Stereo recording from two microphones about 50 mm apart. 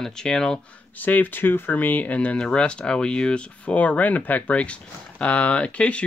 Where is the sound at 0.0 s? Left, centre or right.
Centre.